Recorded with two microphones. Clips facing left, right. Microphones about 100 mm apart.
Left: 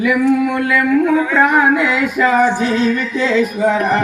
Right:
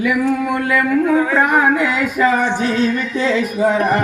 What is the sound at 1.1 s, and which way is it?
Speech, 35° right (ahead or behind).